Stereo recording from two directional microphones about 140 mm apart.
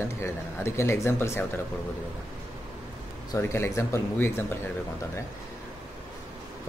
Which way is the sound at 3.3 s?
20° left (ahead or behind).